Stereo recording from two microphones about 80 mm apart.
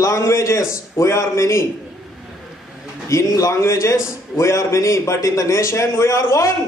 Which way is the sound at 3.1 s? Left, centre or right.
Left.